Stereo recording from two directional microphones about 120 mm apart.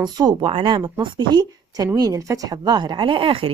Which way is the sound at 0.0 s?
35° right (ahead or behind).